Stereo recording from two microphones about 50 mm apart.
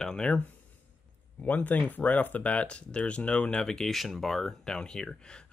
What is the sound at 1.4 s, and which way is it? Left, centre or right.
Speech, left.